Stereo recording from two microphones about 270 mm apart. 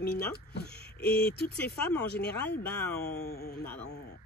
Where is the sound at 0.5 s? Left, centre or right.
Left.